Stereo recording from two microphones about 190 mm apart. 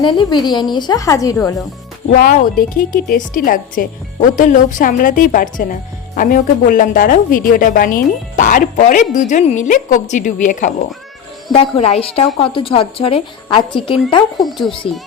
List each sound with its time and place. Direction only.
0.0 s a woman's voice: 25° left (ahead or behind)
2.1 s a woman's voice: 50° left (ahead or behind); by 13.9 s 25° left (ahead or behind)
14.3 s speech: centre (ahead or behind)